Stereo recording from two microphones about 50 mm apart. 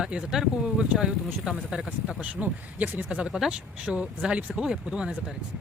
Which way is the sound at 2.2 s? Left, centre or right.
Right.